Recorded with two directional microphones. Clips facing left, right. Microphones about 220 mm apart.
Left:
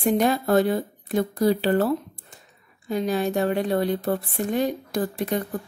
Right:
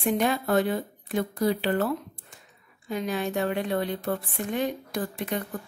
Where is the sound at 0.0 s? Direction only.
40° left (ahead or behind).